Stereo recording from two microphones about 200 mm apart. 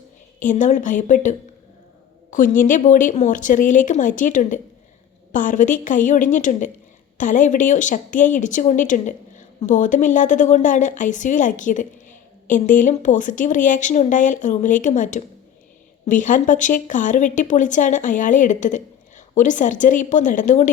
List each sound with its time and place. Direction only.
0.3 s speech: 40° left (ahead or behind)